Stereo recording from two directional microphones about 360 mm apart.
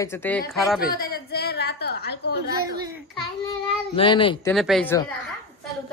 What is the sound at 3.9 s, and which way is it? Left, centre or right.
Speech, centre.